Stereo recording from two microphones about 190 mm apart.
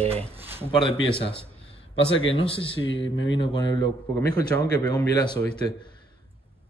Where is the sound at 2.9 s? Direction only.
80° left.